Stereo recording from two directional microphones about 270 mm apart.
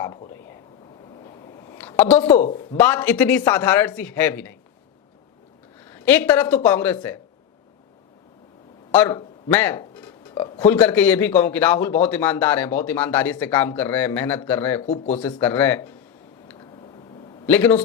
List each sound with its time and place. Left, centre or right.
0.0 s speech: centre
1.8 s a sound: centre
2.1 s speech: left
2.7 s a man's voice: centre
5.9 s a man's voice: centre
8.9 s a man's voice: centre
14.8 s speech: left
15.4 s a man's voice: centre
17.4 s a man's voice: centre